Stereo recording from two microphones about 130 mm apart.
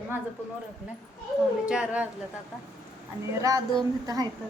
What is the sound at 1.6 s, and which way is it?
Speech, 5° right (ahead or behind).